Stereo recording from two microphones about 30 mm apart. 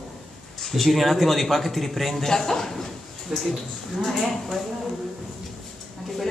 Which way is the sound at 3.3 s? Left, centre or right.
Centre.